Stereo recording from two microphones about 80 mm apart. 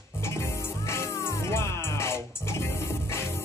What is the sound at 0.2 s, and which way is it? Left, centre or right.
Music, left.